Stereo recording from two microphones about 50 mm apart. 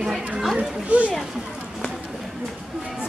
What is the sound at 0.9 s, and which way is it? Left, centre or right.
Speech, right.